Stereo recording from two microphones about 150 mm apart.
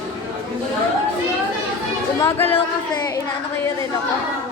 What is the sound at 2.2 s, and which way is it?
Speech, 15° left (ahead or behind).